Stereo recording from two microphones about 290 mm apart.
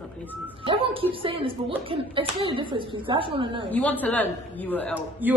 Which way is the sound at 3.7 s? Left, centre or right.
Centre.